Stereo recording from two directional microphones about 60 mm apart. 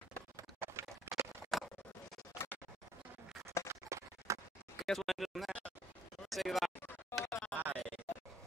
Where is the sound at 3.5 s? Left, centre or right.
Right.